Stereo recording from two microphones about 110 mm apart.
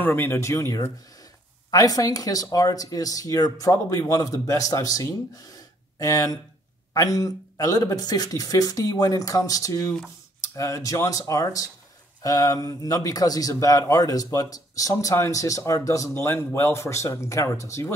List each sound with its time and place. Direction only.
0.0 s a man's voice: 20° left (ahead or behind)